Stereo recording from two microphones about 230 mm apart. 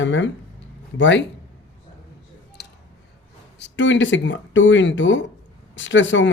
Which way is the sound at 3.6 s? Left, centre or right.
Left.